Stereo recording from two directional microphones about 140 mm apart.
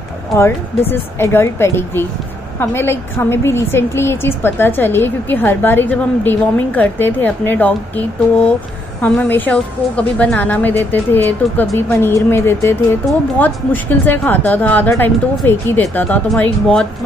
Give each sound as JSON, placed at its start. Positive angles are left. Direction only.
{"t": 0.4, "sound": "a woman's voice", "side_deg": 20}